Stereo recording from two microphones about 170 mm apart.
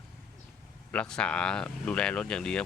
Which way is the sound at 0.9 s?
5° left (ahead or behind).